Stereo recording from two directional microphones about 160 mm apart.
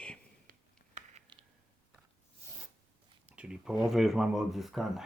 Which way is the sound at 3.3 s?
5° right (ahead or behind).